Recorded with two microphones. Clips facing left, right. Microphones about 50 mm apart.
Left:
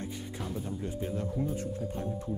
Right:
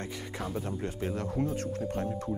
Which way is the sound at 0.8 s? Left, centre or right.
Right.